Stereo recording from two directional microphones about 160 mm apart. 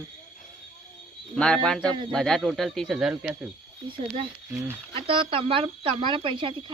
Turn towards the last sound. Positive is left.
turn(degrees=-30)  # may be behind; listen again after turning